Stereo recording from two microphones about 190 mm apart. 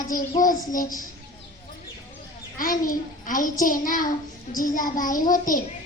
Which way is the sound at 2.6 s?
45° left (ahead or behind).